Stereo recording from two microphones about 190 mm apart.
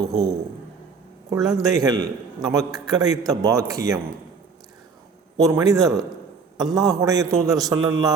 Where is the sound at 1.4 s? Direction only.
Centre (ahead or behind).